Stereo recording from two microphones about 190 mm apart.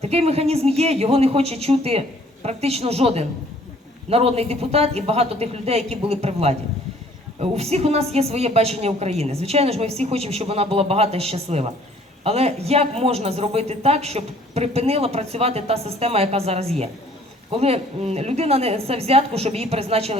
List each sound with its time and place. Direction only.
0.0 s speech: 35° right (ahead or behind)